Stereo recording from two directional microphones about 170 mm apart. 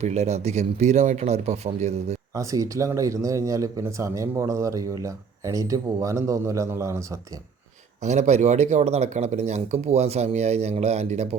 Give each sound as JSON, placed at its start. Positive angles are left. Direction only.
{"t": 0.0, "sound": "speech", "side_deg": -40}
{"t": 2.3, "sound": "speech", "side_deg": -20}
{"t": 8.0, "sound": "speech", "side_deg": -45}